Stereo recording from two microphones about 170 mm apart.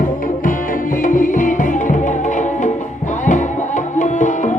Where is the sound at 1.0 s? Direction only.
50° left (ahead or behind).